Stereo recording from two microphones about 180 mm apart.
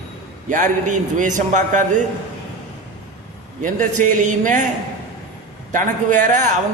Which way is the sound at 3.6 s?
45° right (ahead or behind).